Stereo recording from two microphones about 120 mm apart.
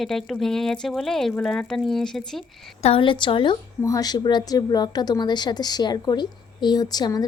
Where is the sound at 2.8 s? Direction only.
50° left (ahead or behind).